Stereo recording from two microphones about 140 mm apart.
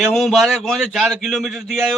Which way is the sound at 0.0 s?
Centre (ahead or behind).